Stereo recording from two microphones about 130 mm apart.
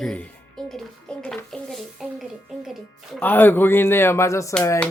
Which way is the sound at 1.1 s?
5° left (ahead or behind).